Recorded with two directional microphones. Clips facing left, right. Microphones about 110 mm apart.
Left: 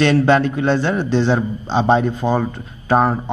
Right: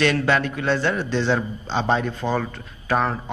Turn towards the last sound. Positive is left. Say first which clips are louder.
# left 6 dB
turn(degrees=30)  # may be behind; listen again after turning